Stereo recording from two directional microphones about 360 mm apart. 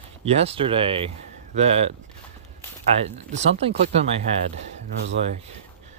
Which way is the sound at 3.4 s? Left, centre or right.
Centre.